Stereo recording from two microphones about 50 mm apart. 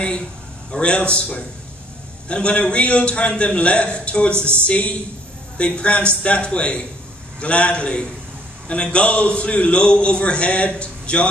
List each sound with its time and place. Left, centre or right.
0.7 s a man's voice: left